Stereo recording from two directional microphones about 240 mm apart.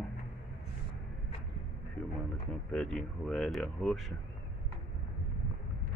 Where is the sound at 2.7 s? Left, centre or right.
Centre.